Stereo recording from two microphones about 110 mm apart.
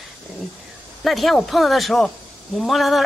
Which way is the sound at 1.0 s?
Centre (ahead or behind).